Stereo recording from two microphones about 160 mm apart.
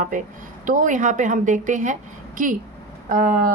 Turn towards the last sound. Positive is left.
turn(degrees=-55)  # may be behind; listen again after turning